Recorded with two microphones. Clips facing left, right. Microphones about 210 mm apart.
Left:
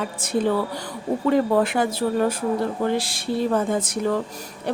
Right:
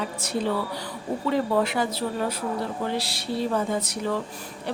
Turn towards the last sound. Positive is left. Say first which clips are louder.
# left 4 dB
turn(degrees=50)  # may be behind; listen again after turning